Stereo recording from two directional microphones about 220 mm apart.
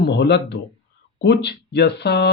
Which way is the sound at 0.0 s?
50° left (ahead or behind).